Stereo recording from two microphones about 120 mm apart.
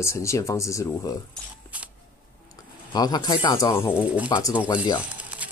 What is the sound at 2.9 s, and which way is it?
Speech, 35° left (ahead or behind).